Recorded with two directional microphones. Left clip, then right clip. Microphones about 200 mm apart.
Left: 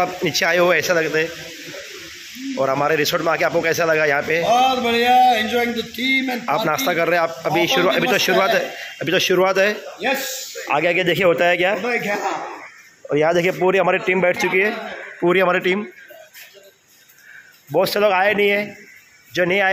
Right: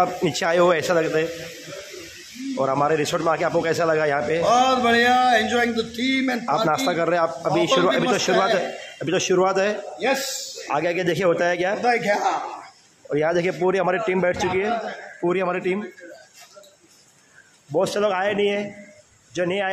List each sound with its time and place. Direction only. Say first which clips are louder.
0.0 s a man's voice: left 2 dB; 15° right (ahead or behind)
2.5 s a man's voice: left 2 dB; centre (ahead or behind)
13.1 s a man's voice: left 4 dB; 10° left (ahead or behind)
15.2 s a man's voice: left 6 dB; 20° left (ahead or behind)
17.7 s a man's voice: left 5 dB; 15° left (ahead or behind)